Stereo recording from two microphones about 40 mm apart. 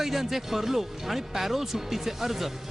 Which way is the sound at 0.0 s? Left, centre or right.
Centre.